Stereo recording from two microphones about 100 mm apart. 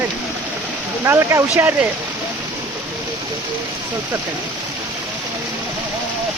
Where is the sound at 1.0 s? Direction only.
25° right (ahead or behind).